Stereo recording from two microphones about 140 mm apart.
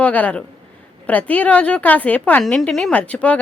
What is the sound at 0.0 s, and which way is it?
A woman's voice, 10° left (ahead or behind).